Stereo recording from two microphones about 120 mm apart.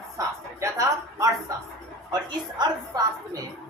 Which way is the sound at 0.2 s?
25° right (ahead or behind).